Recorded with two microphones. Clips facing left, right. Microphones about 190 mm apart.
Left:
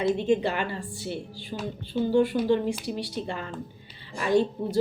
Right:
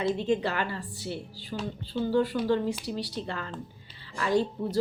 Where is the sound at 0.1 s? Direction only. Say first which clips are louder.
Left 3 dB; 20° left (ahead or behind).